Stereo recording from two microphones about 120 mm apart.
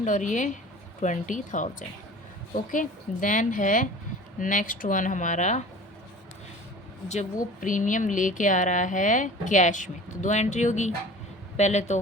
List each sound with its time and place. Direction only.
0.0 s speech: 90° left
2.7 s speech: 90° left
7.6 s speech: 90° left
11.5 s speech: 70° left (ahead or behind)